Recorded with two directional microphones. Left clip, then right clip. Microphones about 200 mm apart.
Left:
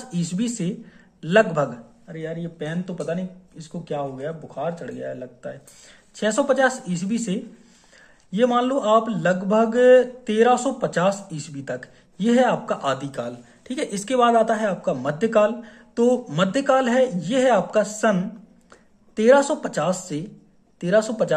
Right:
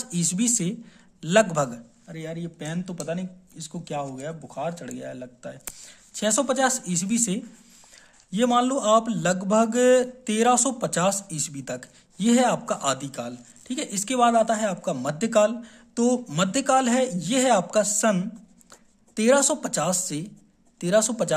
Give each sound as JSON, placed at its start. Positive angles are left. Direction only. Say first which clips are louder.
{"t": 0.1, "sound": "speech", "louder": "right 2 dB", "side_deg": -35}